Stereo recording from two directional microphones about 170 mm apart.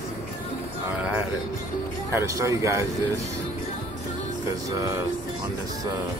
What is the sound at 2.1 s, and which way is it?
Speech, 20° right (ahead or behind).